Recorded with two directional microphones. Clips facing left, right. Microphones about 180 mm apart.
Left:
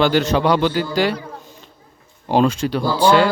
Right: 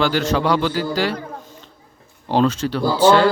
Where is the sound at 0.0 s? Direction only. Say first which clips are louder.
Left 3 dB; 20° left (ahead or behind).